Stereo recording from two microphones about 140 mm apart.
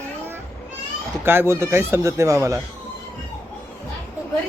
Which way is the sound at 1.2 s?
15° right (ahead or behind).